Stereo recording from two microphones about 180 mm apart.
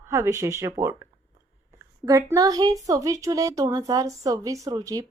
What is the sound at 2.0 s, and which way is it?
A woman's voice, 20° right (ahead or behind).